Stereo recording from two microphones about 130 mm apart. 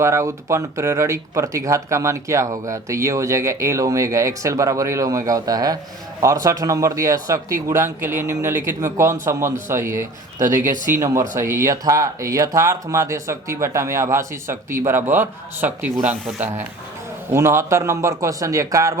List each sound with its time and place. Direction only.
0.0 s speech: 20° right (ahead or behind)
10.4 s speech: 85° right
10.9 s speech: 20° right (ahead or behind)